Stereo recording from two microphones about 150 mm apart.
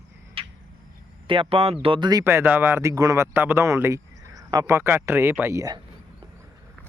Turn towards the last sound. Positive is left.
turn(degrees=-20)  # may be behind; listen again after turning